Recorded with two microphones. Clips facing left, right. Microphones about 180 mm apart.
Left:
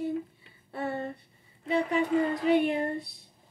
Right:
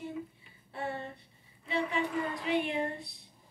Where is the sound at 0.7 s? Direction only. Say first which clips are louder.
Left 5 dB; 45° left (ahead or behind).